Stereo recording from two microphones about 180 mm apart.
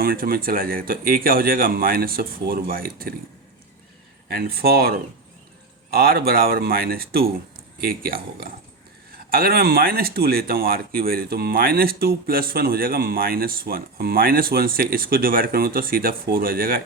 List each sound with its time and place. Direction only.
0.0 s speech: 55° right (ahead or behind)
4.3 s speech: 60° right (ahead or behind)